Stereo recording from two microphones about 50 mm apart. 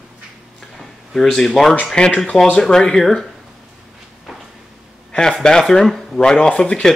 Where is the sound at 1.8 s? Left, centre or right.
Centre.